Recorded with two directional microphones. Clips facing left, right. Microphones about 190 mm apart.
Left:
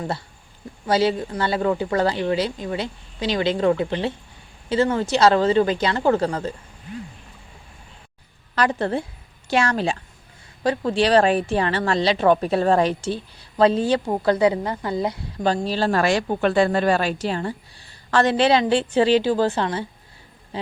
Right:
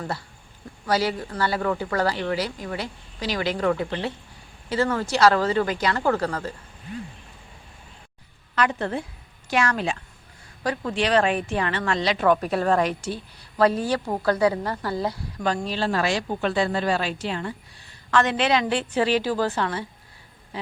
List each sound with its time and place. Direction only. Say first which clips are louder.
0.9 s speech: left 4 dB; 25° left (ahead or behind)
8.5 s a woman's voice: left 3 dB; 35° left (ahead or behind); by 15.2 s 20° left (ahead or behind)
15.5 s a woman's voice: left 4 dB; 35° left (ahead or behind)
15.9 s a woman's voice: left 5 dB; 50° left (ahead or behind); by 19.8 s 25° left (ahead or behind)